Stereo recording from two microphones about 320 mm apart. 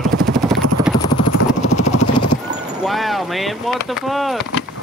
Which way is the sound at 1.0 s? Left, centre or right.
Left.